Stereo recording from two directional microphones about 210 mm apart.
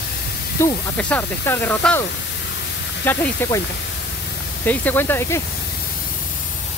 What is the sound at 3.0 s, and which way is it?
Speech, 10° left (ahead or behind).